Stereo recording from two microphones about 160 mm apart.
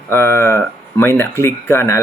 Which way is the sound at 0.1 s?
15° left (ahead or behind).